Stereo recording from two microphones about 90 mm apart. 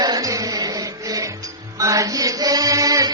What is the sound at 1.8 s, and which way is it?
Music, 40° right (ahead or behind).